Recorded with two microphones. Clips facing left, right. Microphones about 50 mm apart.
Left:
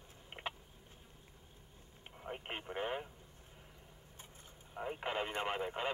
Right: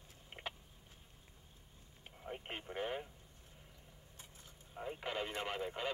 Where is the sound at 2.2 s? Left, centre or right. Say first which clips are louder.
Left 2 dB; centre.